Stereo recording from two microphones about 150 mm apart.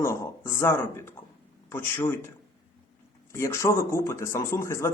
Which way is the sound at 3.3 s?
20° left (ahead or behind).